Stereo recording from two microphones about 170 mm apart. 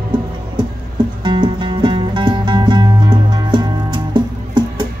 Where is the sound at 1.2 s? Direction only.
25° right (ahead or behind).